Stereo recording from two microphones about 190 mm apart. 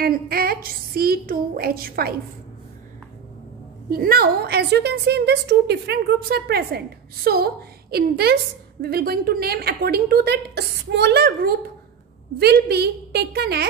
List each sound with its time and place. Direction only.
0.0 s a woman's voice: 50° right (ahead or behind)
3.9 s a woman's voice: 50° right (ahead or behind)